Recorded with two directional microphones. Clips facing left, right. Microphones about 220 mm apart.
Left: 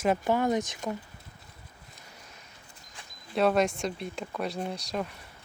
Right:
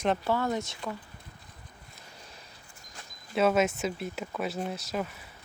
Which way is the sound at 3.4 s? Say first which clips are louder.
Even; centre (ahead or behind).